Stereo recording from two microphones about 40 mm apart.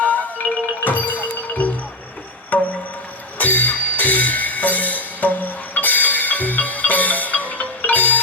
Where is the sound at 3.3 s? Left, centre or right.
Left.